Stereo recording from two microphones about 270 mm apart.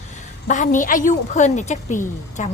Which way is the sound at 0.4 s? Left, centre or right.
Left.